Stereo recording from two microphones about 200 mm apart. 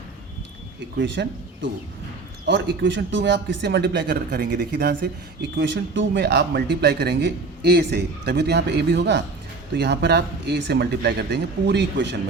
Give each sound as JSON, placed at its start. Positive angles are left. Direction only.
{"t": 0.9, "sound": "speech", "side_deg": -60}